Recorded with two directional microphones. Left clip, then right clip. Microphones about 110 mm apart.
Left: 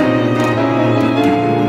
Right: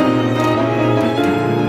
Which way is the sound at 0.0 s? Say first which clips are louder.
Left 1 dB; 15° left (ahead or behind).